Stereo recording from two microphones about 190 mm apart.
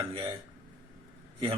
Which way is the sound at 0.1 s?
25° right (ahead or behind).